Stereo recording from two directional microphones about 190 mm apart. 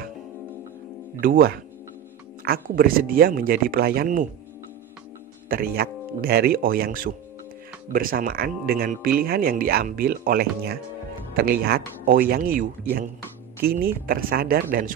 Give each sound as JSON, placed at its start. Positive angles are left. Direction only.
{"t": 1.2, "sound": "speech", "side_deg": -50}
{"t": 5.5, "sound": "speech", "side_deg": -50}